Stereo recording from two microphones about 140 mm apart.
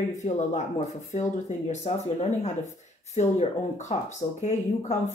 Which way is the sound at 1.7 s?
55° left (ahead or behind).